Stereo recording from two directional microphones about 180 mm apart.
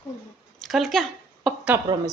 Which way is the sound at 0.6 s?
Centre (ahead or behind).